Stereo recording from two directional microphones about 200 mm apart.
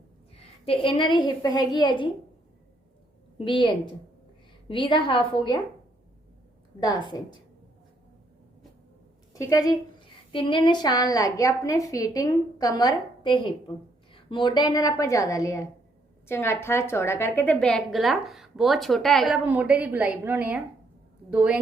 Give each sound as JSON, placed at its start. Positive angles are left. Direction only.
{"t": 0.3, "sound": "a woman's voice", "side_deg": 30}
{"t": 3.3, "sound": "a woman's voice", "side_deg": 25}
{"t": 6.7, "sound": "a woman's voice", "side_deg": 20}
{"t": 9.3, "sound": "a woman's voice", "side_deg": 15}